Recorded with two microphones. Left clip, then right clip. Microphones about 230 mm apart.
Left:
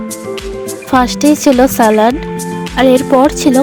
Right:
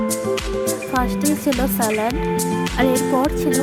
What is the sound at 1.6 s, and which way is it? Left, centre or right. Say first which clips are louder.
Speech: left 12 dB; left.